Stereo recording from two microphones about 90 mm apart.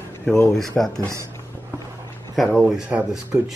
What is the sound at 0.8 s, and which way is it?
Speech, 10° left (ahead or behind).